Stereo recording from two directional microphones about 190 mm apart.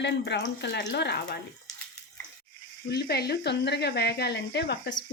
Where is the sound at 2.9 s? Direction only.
60° left (ahead or behind).